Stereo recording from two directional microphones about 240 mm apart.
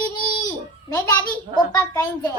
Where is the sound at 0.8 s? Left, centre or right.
Centre.